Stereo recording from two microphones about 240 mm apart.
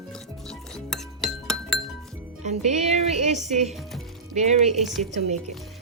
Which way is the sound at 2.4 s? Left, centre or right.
Right.